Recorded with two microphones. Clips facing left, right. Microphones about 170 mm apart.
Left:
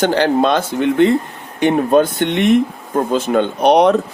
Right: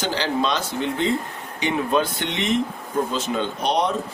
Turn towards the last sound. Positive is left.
turn(degrees=65)  # may be behind; listen again after turning